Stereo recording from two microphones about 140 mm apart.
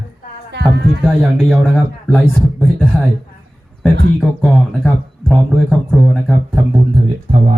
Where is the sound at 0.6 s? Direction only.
Centre (ahead or behind).